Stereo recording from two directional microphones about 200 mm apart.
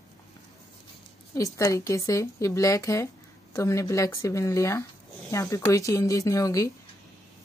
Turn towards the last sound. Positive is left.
turn(degrees=15)  # may be behind; listen again after turning